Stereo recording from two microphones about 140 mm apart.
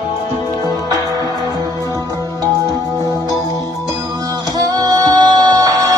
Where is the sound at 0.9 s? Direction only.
25° right (ahead or behind).